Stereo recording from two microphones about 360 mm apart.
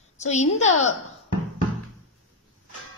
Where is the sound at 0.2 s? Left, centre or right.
Centre.